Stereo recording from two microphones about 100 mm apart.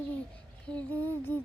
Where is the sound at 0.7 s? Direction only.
40° right (ahead or behind).